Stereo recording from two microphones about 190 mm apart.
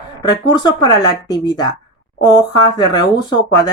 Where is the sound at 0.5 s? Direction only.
20° left (ahead or behind).